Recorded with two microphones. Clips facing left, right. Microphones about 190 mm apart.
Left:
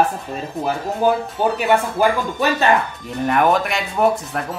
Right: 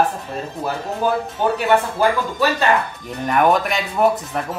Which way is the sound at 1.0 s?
15° left (ahead or behind).